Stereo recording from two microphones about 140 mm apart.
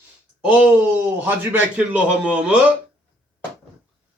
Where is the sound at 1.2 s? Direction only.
15° right (ahead or behind).